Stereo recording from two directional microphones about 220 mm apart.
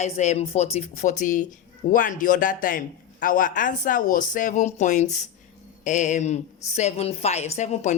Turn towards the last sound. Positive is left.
turn(degrees=30)  # may be behind; listen again after turning